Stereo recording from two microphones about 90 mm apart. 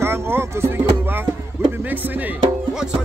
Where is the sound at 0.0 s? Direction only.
25° right (ahead or behind).